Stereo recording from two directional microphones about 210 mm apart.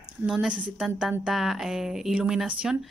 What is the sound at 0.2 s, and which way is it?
Speech, 5° right (ahead or behind).